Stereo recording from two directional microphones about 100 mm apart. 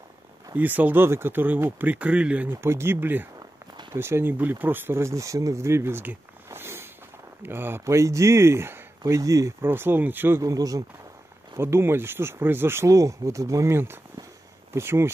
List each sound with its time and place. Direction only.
0.6 s speech: 15° right (ahead or behind); by 9.5 s 35° right (ahead or behind)
9.6 s speech: 20° right (ahead or behind)
10.4 s speech: 35° right (ahead or behind)
11.5 s speech: 25° right (ahead or behind)